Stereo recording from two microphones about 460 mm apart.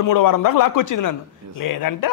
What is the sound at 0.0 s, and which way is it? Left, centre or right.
Speech, left.